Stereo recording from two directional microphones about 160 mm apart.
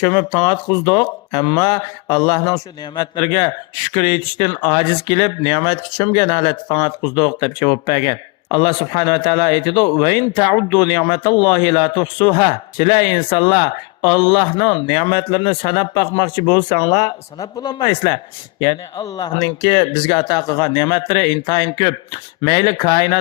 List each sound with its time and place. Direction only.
0.0 s speech: 25° left (ahead or behind)